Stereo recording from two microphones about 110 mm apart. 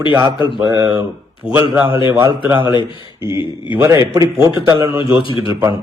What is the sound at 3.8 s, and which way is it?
A man's voice, 30° right (ahead or behind).